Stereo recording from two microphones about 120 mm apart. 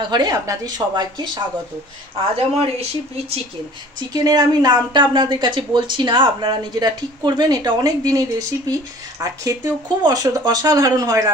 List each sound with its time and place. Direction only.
0.1 s speech: 35° right (ahead or behind)
2.3 s speech: 55° right (ahead or behind)
4.1 s speech: 30° right (ahead or behind)